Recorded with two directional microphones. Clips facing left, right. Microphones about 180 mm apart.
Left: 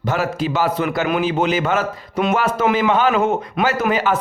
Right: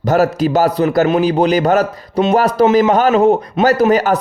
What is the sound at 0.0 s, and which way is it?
Speech, 40° right (ahead or behind).